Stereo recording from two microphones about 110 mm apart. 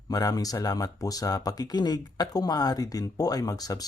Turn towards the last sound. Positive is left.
turn(degrees=35)  # may be behind; listen again after turning